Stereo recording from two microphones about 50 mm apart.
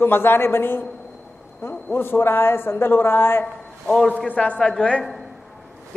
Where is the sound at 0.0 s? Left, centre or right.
Left.